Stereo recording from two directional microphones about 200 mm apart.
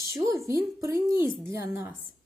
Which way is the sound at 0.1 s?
15° right (ahead or behind).